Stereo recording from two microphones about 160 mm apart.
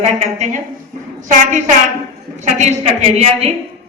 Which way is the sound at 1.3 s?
50° right (ahead or behind).